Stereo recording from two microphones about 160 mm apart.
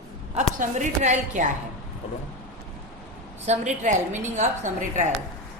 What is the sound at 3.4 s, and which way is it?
A woman's voice, 45° right (ahead or behind).